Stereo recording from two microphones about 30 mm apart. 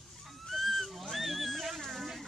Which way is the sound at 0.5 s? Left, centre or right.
Centre.